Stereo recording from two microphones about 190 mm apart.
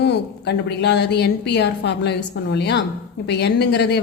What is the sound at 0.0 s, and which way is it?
Speech, 60° left (ahead or behind).